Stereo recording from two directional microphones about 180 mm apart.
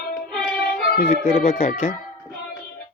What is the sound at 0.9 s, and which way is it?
Speech, 50° left (ahead or behind).